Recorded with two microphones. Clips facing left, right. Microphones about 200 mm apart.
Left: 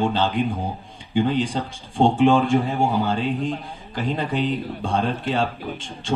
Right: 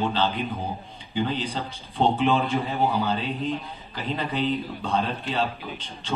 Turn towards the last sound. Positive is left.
turn(degrees=50)  # may be behind; listen again after turning